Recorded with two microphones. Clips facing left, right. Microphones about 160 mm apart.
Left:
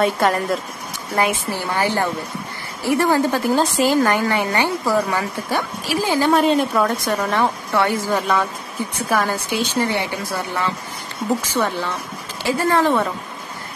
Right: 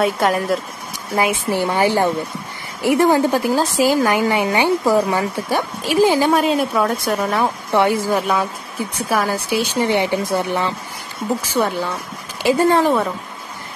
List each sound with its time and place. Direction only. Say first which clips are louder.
0.0 s a woman's voice: right 1 dB; centre (ahead or behind)
1.5 s a woman's voice: right 4 dB; 15° right (ahead or behind)
6.3 s a woman's voice: even; 5° right (ahead or behind)